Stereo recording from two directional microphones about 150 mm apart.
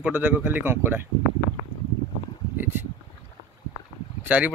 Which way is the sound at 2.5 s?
15° right (ahead or behind).